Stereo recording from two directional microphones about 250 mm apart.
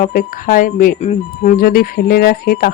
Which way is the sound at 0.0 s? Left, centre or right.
Left.